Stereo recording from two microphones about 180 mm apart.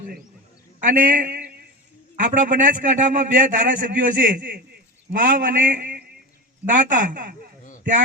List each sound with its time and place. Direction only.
0.8 s a man's voice: 50° right (ahead or behind)